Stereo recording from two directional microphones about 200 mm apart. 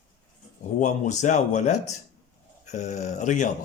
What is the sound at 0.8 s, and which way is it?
Speech, 35° left (ahead or behind).